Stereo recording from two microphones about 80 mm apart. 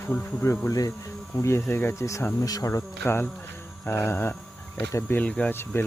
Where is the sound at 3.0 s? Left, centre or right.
Left.